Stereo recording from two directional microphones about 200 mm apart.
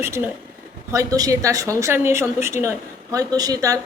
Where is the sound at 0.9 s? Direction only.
15° right (ahead or behind).